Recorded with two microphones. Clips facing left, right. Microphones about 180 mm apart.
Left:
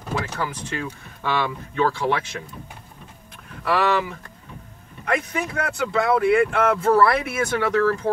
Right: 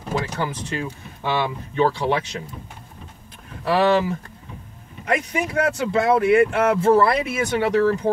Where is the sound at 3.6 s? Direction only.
30° right (ahead or behind).